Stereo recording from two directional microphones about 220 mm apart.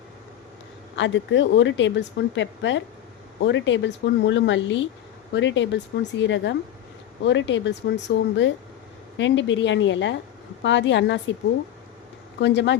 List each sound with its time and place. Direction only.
0.9 s a woman's voice: 55° left (ahead or behind)
12.4 s speech: 55° left (ahead or behind)